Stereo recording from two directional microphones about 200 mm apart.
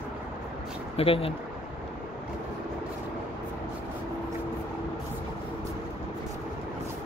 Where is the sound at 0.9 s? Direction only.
30° left (ahead or behind).